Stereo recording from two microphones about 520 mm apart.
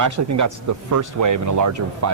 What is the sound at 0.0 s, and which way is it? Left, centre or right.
Speech, right.